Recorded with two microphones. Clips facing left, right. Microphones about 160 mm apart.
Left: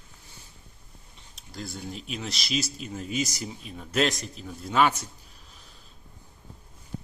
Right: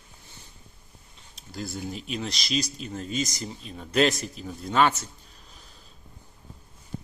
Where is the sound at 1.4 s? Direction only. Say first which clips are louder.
Right 3 dB; centre (ahead or behind).